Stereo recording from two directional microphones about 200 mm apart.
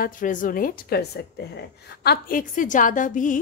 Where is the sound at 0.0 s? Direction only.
40° left (ahead or behind).